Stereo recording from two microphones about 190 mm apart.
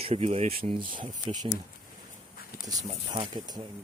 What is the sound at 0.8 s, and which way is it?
Speech, 45° right (ahead or behind).